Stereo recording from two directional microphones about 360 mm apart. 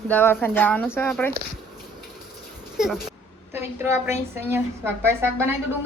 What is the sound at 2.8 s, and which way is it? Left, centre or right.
A woman's voice, centre.